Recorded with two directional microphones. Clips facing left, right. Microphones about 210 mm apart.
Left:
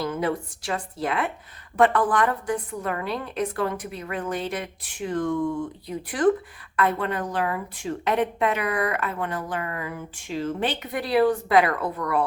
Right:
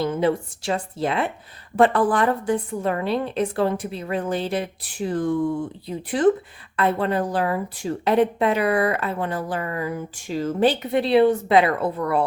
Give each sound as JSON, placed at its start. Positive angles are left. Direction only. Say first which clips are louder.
{"t": 0.0, "sound": "a woman's voice", "louder": "right 5 dB", "side_deg": -25}